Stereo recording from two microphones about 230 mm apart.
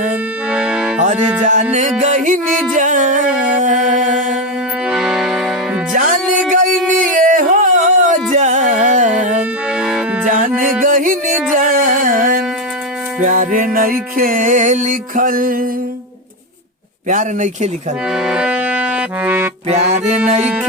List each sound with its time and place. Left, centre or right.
0.1 s music: centre
1.4 s music: right
4.9 s music: centre
5.9 s music: right
7.2 s a sound: right
9.4 s music: centre
10.2 s music: right
17.1 s music: right
18.1 s music: centre
19.6 s music: right